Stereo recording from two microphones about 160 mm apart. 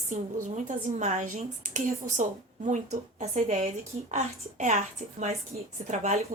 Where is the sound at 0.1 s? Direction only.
50° right (ahead or behind).